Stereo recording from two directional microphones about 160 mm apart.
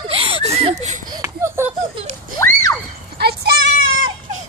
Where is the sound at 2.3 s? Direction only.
15° left (ahead or behind).